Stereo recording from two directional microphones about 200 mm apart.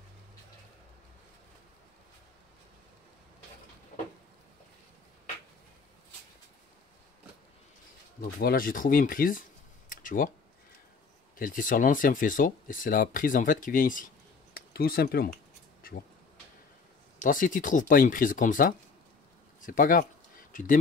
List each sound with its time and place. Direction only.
8.2 s speech: 50° left (ahead or behind)
9.8 s a sound: 45° left (ahead or behind)
11.3 s speech: 40° left (ahead or behind)
17.2 s speech: 40° left (ahead or behind)